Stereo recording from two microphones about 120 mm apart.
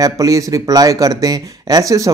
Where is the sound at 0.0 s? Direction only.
30° right (ahead or behind).